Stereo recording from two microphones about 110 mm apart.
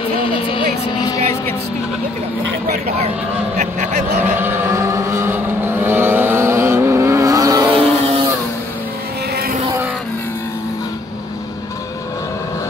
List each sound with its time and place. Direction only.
0.3 s vehicle: 50° left (ahead or behind)
3.5 s a sound: 90° right
4.4 s vehicle: 20° right (ahead or behind)